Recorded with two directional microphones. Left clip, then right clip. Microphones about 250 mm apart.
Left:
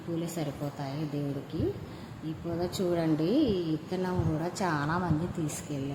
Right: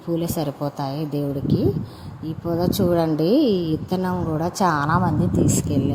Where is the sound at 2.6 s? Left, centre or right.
Right.